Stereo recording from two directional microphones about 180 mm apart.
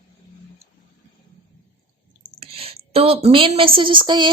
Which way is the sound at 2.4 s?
30° right (ahead or behind).